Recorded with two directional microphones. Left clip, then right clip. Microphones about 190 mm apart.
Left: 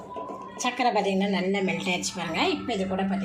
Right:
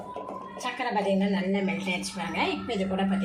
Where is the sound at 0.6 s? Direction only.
45° left (ahead or behind).